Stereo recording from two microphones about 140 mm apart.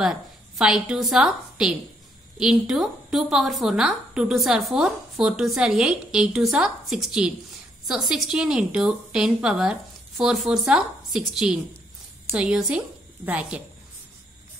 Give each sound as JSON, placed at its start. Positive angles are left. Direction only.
{"t": 0.0, "sound": "a woman's voice", "side_deg": -5}